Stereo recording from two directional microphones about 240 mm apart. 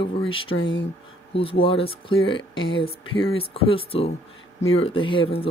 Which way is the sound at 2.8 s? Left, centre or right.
Left.